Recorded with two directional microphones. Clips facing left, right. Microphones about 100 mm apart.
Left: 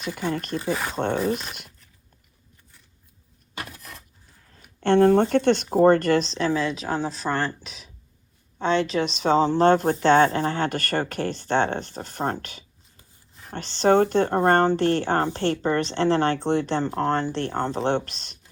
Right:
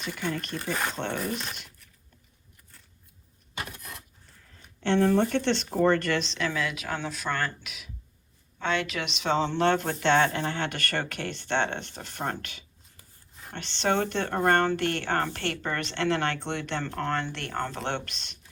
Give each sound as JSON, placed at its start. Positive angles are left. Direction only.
{"t": 0.2, "sound": "speech", "side_deg": 30}
{"t": 0.7, "sound": "speech", "side_deg": 0}
{"t": 0.9, "sound": "speech", "side_deg": 35}
{"t": 1.5, "sound": "a sound", "side_deg": 35}
{"t": 4.8, "sound": "speech", "side_deg": 50}